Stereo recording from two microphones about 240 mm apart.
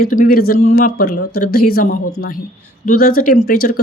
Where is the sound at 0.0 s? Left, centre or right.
Left.